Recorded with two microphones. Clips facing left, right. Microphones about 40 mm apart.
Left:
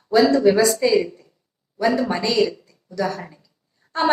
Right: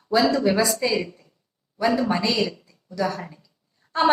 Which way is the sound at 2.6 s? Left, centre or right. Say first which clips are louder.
Left 1 dB; centre.